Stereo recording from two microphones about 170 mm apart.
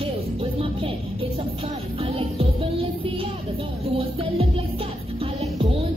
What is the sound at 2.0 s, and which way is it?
Music, 35° right (ahead or behind).